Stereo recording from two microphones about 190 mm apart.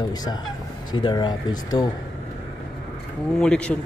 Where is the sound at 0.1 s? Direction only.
20° left (ahead or behind).